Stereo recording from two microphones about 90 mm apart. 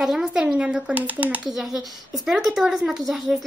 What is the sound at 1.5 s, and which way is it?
Speech, 5° right (ahead or behind).